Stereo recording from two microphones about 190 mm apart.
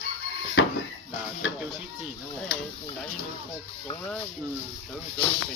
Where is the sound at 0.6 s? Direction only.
75° left (ahead or behind).